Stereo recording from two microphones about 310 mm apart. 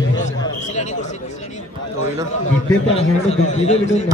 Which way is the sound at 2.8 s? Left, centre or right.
Centre.